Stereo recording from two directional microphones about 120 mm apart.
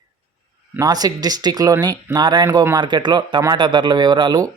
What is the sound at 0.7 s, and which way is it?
Speech, 35° right (ahead or behind).